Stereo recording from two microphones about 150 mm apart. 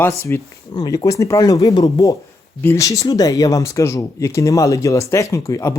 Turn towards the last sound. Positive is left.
turn(degrees=20)  # may be behind; listen again after turning